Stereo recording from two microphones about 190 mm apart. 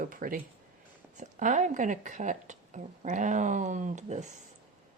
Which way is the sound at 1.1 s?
40° right (ahead or behind).